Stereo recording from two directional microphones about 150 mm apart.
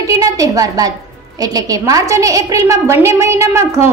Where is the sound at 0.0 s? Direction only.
20° right (ahead or behind).